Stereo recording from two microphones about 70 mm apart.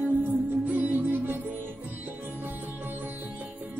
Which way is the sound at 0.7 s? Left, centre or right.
Right.